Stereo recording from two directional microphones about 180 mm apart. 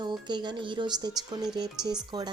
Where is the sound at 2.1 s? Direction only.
25° right (ahead or behind).